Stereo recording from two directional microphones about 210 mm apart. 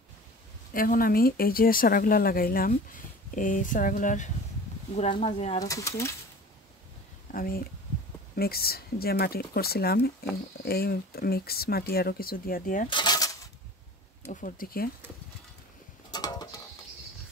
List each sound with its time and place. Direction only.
0.7 s speech: 40° left (ahead or behind)
5.6 s speech: 15° left (ahead or behind)
7.3 s speech: 45° left (ahead or behind)
12.9 s coin: 20° left (ahead or behind)
14.2 s speech: 40° left (ahead or behind)
16.1 s a sound: 20° left (ahead or behind)